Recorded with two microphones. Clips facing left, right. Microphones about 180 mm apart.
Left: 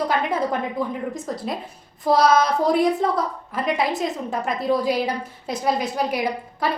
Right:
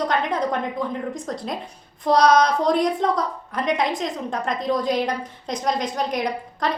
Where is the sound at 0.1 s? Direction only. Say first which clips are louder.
Even; 5° left (ahead or behind).